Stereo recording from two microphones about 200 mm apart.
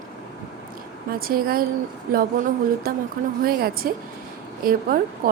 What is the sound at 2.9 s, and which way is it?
A woman's voice, 45° right (ahead or behind).